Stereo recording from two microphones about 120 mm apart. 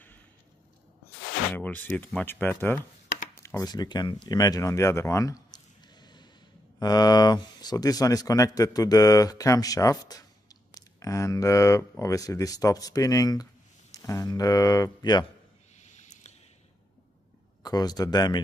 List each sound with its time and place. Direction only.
1.5 s speech: 15° left (ahead or behind); by 15.2 s 35° left (ahead or behind)
15.8 s a sound: 90° left
17.6 s speech: 30° left (ahead or behind)